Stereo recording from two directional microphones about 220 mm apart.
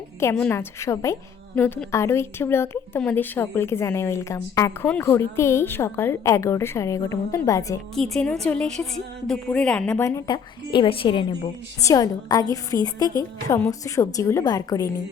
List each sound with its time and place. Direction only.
0.2 s a woman's voice: 10° left (ahead or behind)
7.9 s a woman's voice: centre (ahead or behind); by 14.8 s 15° left (ahead or behind)